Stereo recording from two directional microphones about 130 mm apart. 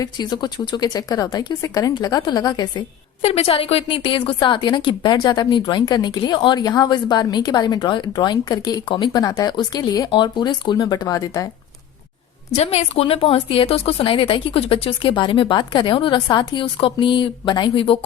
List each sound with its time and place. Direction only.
0.0 s speech: 35° left (ahead or behind)
3.2 s speech: 50° left (ahead or behind); by 11.4 s 25° left (ahead or behind)
12.5 s speech: 50° left (ahead or behind)